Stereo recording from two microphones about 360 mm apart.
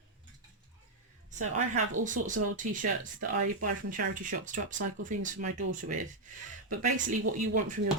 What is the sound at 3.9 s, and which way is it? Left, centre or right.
Speech, right.